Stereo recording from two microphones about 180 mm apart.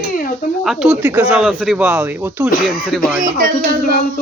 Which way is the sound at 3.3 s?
50° right (ahead or behind).